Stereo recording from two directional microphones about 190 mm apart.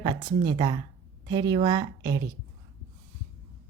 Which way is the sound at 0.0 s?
25° right (ahead or behind).